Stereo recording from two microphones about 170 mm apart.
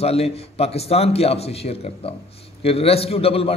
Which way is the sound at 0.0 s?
35° left (ahead or behind).